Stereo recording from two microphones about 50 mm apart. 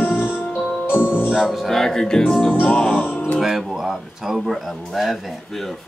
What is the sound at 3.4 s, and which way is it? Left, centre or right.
Speech, centre.